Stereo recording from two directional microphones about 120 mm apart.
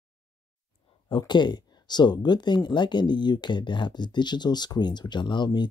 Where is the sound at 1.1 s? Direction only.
40° left (ahead or behind).